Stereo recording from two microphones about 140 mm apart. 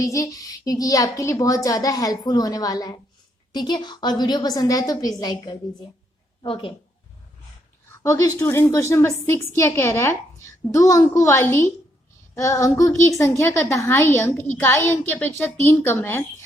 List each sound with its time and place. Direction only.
0.0 s a woman's voice: 25° left (ahead or behind); by 6.7 s 40° left (ahead or behind)
8.0 s a woman's voice: 20° left (ahead or behind)